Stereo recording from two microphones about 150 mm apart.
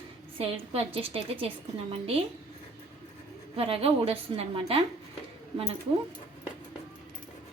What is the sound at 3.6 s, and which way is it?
A woman's voice, 40° right (ahead or behind).